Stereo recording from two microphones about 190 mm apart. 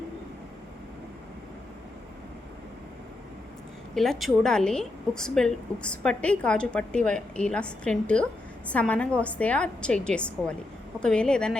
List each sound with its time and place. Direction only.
3.9 s a woman's voice: centre (ahead or behind)